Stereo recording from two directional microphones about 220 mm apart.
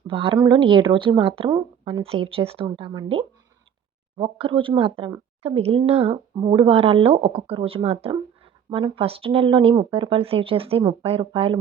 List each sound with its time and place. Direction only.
0.1 s speech: 25° right (ahead or behind)